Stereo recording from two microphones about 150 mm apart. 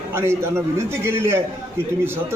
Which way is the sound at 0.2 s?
15° right (ahead or behind).